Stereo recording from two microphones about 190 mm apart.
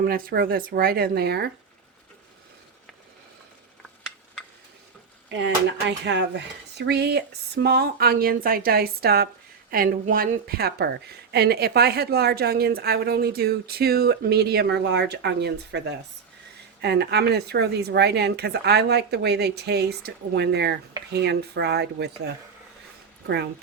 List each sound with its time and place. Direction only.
0.0 s speech: 50° right (ahead or behind)
6.1 s speech: 65° right (ahead or behind)